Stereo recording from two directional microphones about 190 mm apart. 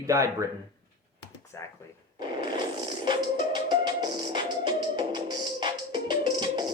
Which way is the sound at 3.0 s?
20° right (ahead or behind).